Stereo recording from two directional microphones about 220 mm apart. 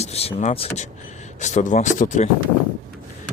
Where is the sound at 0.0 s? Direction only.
30° left (ahead or behind).